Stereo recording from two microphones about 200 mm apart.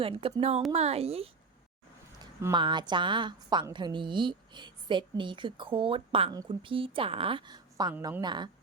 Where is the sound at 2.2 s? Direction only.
20° right (ahead or behind).